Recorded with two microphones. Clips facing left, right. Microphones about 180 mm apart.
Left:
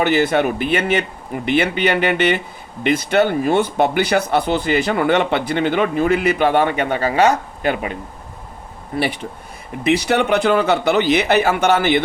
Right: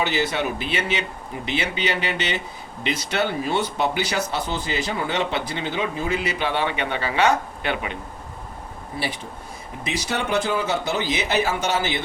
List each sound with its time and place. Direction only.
0.0 s speech: 55° left (ahead or behind)
8.9 s speech: 65° left (ahead or behind)